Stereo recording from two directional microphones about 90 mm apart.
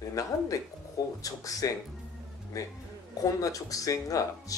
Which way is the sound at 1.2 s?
40° left (ahead or behind).